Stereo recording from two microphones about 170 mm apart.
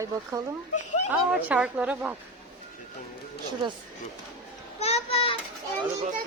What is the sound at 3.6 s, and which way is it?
Speech, 30° right (ahead or behind).